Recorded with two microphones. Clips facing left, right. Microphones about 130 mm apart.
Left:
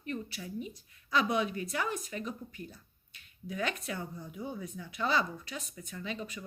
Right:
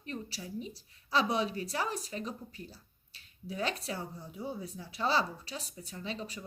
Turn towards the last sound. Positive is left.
turn(degrees=-35)  # may be behind; listen again after turning